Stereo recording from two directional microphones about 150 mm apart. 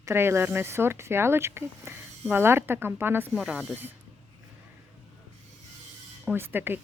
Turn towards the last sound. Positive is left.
turn(degrees=-15)  # may be behind; listen again after turning